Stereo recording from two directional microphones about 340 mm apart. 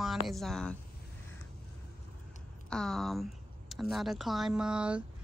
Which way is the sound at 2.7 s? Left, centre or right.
Centre.